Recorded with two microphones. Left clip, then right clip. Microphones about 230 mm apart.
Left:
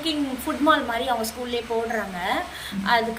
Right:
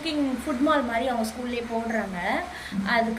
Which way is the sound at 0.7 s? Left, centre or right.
Centre.